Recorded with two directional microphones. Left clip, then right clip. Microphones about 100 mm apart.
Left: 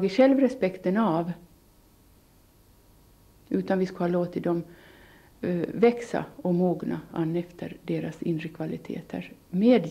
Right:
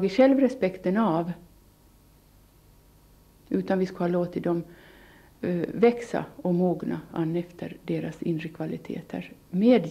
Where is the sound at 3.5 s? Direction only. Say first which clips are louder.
Even; 25° left (ahead or behind).